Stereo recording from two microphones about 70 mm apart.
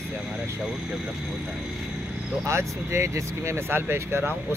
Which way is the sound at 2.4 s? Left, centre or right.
Right.